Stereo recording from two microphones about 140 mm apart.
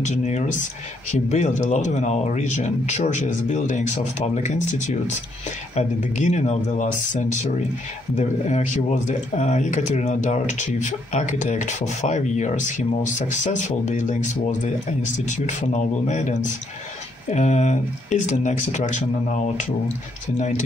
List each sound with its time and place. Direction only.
0.0 s speech: 55° left (ahead or behind)